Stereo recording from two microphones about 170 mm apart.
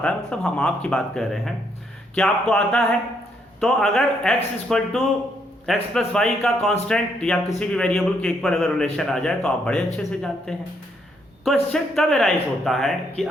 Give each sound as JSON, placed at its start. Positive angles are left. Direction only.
{"t": 0.0, "sound": "a man's voice", "side_deg": 5}